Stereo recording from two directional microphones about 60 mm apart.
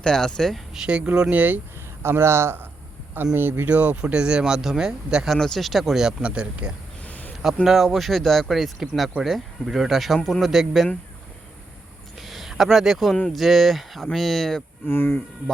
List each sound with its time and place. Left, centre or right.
0.0 s speech: centre
0.9 s speech: centre
1.3 s speech: right
2.0 s speech: right
3.7 s speech: right
5.4 s speech: centre
7.0 s a sound: left
7.4 s speech: centre
12.1 s a sound: centre
13.3 s speech: centre
14.8 s speech: left